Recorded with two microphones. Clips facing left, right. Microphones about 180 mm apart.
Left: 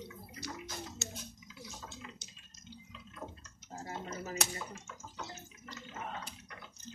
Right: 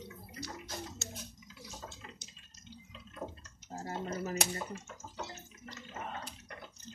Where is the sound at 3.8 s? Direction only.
40° right (ahead or behind).